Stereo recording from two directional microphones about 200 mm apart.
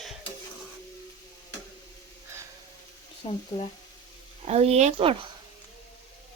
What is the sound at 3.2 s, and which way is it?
Speech, 30° left (ahead or behind).